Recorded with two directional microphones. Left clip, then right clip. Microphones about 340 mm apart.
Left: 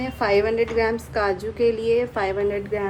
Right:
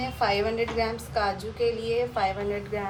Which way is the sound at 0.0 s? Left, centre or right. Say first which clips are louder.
Left 5 dB; left.